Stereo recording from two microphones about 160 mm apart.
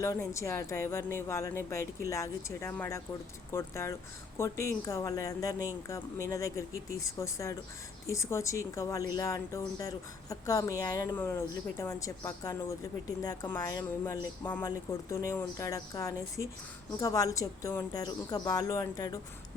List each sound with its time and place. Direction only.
0.0 s speech: 20° left (ahead or behind)